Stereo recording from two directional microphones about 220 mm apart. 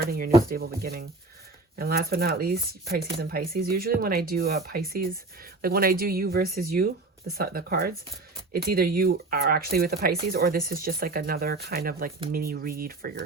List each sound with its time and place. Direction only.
0.0 s speech: 40° right (ahead or behind)